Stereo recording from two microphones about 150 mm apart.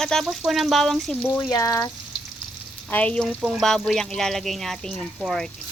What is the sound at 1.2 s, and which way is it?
Speech, 20° left (ahead or behind).